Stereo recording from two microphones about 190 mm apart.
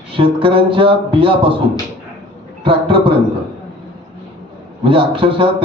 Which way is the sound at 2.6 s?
25° right (ahead or behind).